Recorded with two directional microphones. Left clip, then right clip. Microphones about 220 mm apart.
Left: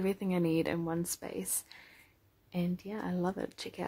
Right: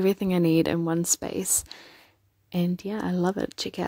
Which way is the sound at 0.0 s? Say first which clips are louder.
Right 9 dB; 35° right (ahead or behind).